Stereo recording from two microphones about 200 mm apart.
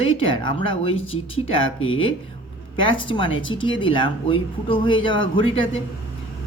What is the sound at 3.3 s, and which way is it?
Speech, 70° left (ahead or behind).